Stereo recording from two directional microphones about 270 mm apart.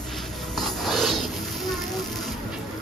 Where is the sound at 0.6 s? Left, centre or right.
Centre.